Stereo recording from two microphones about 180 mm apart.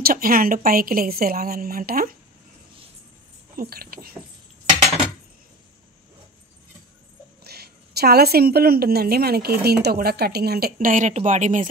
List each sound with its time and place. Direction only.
0.0 s a woman's voice: 55° right (ahead or behind)
3.5 s a woman's voice: 55° right (ahead or behind)
7.4 s a woman's voice: 60° right (ahead or behind); by 11.6 s 40° right (ahead or behind)